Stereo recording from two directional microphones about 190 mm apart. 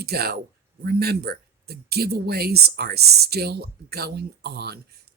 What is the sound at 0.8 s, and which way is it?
Speech, 55° right (ahead or behind).